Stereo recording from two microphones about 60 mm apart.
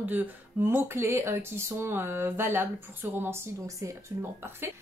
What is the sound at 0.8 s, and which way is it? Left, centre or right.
A woman's voice, right.